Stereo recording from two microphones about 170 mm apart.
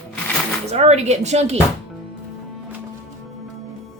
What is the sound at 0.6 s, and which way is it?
Speech, 40° right (ahead or behind).